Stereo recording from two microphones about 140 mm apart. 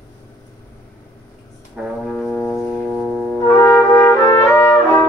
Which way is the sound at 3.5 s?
15° left (ahead or behind).